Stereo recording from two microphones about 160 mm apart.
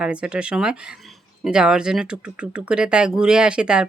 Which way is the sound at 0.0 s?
5° right (ahead or behind).